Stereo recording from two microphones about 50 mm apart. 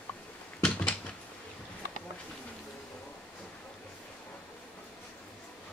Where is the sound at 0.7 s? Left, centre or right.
Left.